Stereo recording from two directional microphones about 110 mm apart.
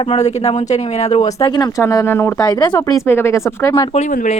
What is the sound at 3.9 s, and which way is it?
Speech, 85° left.